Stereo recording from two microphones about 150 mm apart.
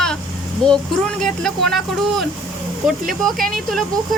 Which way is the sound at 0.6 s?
5° left (ahead or behind).